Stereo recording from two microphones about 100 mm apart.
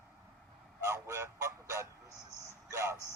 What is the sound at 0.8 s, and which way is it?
Honk, 30° right (ahead or behind).